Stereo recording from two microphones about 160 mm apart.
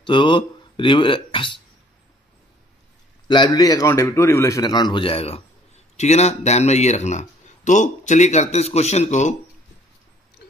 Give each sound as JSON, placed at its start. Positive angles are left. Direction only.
{"t": 0.0, "sound": "speech", "side_deg": 30}
{"t": 3.3, "sound": "a man's voice", "side_deg": 30}